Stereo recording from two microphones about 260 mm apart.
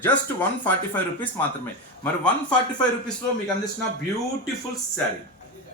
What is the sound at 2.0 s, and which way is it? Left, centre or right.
Speech, centre.